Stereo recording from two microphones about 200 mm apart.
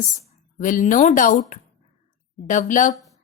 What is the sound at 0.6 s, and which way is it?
Speech, 40° left (ahead or behind).